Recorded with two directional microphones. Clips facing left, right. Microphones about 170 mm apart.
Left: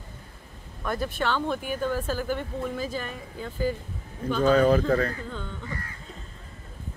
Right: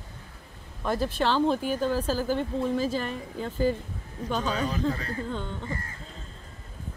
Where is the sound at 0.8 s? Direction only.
30° right (ahead or behind).